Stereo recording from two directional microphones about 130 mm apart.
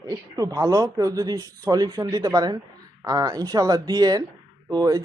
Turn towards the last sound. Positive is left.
turn(degrees=-30)  # may be behind; listen again after turning